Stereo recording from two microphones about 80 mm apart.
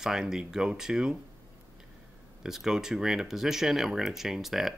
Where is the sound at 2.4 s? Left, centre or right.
Centre.